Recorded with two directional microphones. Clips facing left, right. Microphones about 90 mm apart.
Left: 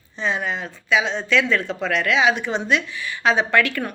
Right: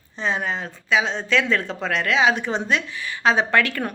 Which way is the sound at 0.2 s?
35° right (ahead or behind).